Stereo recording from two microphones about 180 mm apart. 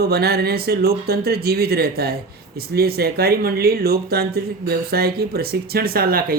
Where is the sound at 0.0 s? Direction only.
60° right (ahead or behind).